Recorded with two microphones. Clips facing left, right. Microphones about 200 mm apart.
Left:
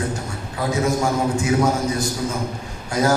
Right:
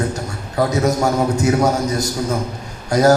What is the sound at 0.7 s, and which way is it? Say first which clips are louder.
A man's voice: even; 40° right (ahead or behind).